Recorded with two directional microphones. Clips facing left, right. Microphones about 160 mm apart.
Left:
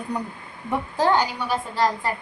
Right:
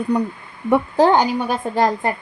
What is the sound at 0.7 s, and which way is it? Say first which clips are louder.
A woman's voice: right 7 dB; 55° right (ahead or behind).